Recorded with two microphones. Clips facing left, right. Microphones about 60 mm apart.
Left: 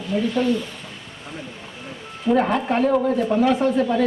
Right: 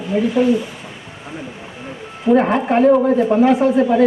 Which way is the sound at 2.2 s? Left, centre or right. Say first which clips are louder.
Right 5 dB; right.